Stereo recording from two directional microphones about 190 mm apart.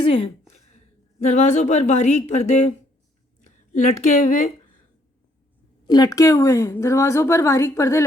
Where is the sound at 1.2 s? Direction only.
40° left (ahead or behind).